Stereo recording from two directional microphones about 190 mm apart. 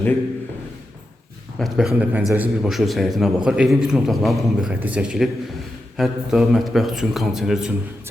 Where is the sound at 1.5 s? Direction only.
Centre (ahead or behind).